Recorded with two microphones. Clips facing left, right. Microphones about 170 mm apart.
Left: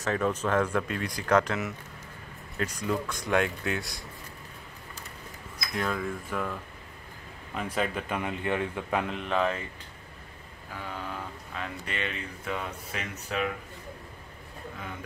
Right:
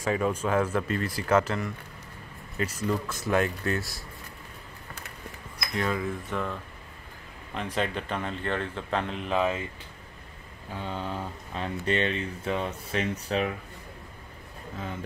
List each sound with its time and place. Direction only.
0.0 s speech: 10° right (ahead or behind)
5.8 s speech: centre (ahead or behind)
9.1 s speech: centre (ahead or behind)
10.8 s speech: 25° right (ahead or behind)